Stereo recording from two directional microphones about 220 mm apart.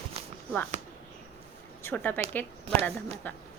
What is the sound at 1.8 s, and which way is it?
Speech, 10° left (ahead or behind).